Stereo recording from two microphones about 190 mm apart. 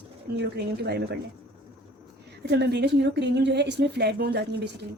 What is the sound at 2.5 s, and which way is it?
A woman's voice, 60° right (ahead or behind).